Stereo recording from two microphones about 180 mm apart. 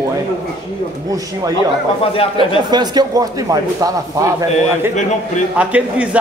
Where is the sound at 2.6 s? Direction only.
25° right (ahead or behind).